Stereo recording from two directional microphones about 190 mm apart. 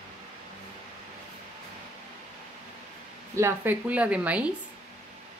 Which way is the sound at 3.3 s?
10° right (ahead or behind).